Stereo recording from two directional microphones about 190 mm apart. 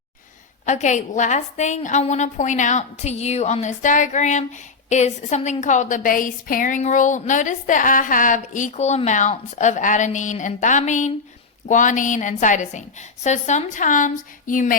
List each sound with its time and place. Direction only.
0.6 s a woman's voice: 40° left (ahead or behind)